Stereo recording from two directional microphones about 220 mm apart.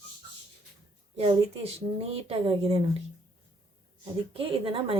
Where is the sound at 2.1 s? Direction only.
25° right (ahead or behind).